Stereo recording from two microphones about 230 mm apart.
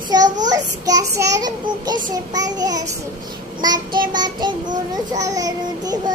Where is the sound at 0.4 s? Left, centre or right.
Centre.